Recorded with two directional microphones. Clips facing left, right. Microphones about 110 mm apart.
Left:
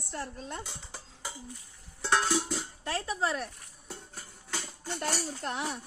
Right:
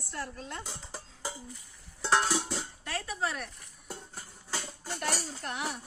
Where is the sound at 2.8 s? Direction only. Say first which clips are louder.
Left 4 dB; 30° left (ahead or behind).